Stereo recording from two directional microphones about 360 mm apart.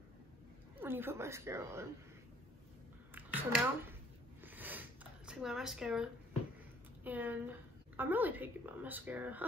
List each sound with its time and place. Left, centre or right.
0.7 s speech: centre
3.2 s a sound: centre
7.0 s a woman's voice: centre